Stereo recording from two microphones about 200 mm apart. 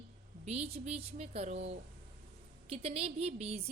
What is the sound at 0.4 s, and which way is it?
A woman's voice, 30° right (ahead or behind).